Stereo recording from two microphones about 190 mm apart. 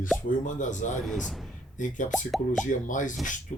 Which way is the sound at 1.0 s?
Centre (ahead or behind).